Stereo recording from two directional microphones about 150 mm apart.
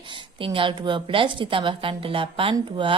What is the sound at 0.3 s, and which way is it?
A woman's voice, 35° right (ahead or behind).